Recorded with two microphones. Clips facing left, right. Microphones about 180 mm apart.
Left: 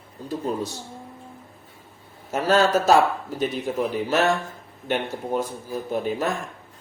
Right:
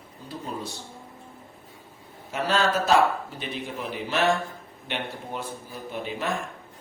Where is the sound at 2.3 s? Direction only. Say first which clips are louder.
Left 5 dB; 40° left (ahead or behind).